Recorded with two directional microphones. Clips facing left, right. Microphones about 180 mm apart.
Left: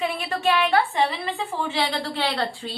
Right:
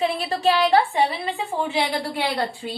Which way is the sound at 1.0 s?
15° right (ahead or behind).